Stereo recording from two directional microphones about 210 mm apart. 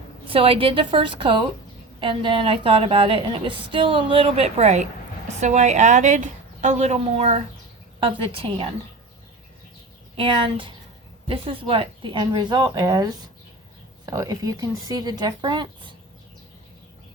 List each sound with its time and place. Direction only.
0.3 s a woman's voice: 25° right (ahead or behind)
10.2 s a woman's voice: 25° right (ahead or behind)